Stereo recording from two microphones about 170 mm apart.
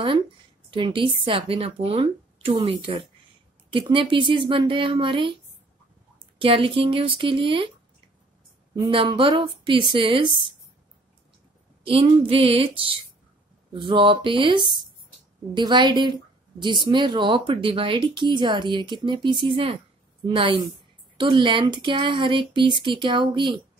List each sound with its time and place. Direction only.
0.7 s a woman's voice: 30° right (ahead or behind)
8.7 s a woman's voice: 30° right (ahead or behind)
11.8 s a woman's voice: 30° right (ahead or behind)